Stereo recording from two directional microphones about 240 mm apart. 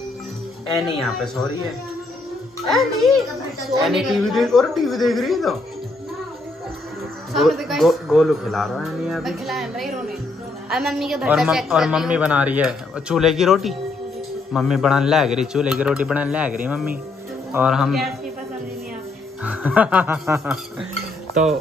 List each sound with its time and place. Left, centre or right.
1.0 s a woman's voice: centre
2.7 s a woman's voice: centre
7.3 s a woman's voice: centre
19.4 s speech: centre